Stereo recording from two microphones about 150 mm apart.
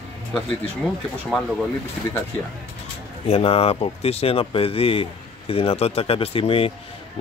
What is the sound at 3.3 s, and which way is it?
Speech, 40° left (ahead or behind).